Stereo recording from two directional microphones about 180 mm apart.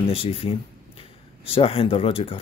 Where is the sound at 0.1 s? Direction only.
35° left (ahead or behind).